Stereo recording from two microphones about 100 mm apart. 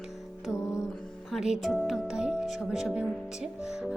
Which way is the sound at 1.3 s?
5° right (ahead or behind).